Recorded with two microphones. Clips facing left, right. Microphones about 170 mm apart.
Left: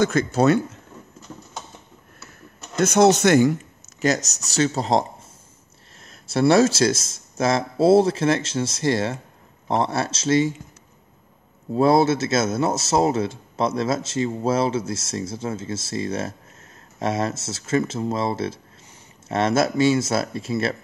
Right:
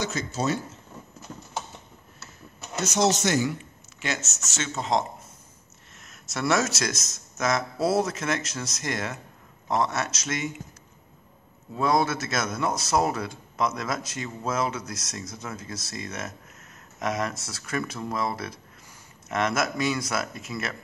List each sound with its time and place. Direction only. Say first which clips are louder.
0.0 s speech: left 10 dB; 55° left (ahead or behind)
2.8 s speech: left 8 dB; 55° left (ahead or behind)
4.0 s speech: left 10 dB; 40° left (ahead or behind)
6.0 s a man's voice: left 8 dB; 30° left (ahead or behind)
11.7 s a man's voice: left 7 dB; 30° left (ahead or behind)